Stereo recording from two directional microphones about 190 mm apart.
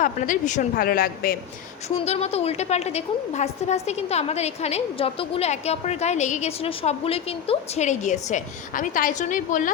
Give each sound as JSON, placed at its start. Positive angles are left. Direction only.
{"t": 0.0, "sound": "a woman's voice", "side_deg": 40}
{"t": 2.0, "sound": "a woman's voice", "side_deg": 30}